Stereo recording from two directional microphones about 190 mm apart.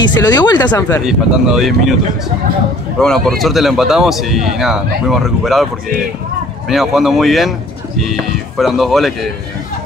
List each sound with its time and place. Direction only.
0.0 s speech: 20° left (ahead or behind)
0.7 s speech: 10° left (ahead or behind)
1.0 s speech: centre (ahead or behind)
6.7 s speech: centre (ahead or behind)